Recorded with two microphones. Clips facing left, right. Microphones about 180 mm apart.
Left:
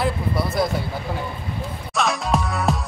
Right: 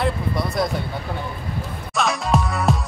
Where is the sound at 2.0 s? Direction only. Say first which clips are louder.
Right 1 dB; centre (ahead or behind).